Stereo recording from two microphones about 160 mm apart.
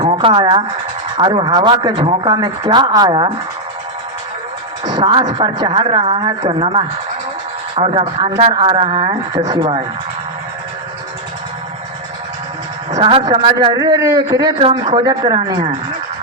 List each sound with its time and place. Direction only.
0.0 s a man's voice: 30° right (ahead or behind)
4.9 s a woman's voice: 30° right (ahead or behind)
13.0 s a woman's voice: 35° right (ahead or behind)
13.7 s a man's voice: 20° right (ahead or behind)